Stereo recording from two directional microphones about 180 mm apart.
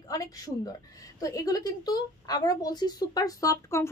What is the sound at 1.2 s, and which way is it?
A woman's voice, 20° left (ahead or behind).